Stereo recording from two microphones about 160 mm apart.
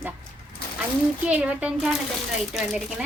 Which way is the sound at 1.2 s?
10° right (ahead or behind).